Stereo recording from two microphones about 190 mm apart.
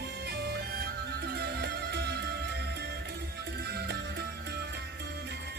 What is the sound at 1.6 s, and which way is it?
Music, 60° right (ahead or behind).